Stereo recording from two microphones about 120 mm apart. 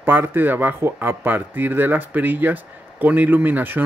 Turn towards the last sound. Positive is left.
turn(degrees=-15)  # may be behind; listen again after turning